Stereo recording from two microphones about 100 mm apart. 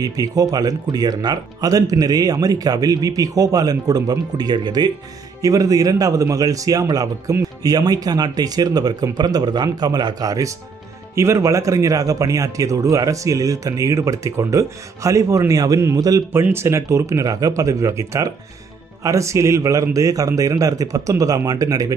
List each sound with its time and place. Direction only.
0.0 s a man's voice: 40° right (ahead or behind)
16.3 s a man's voice: 25° right (ahead or behind)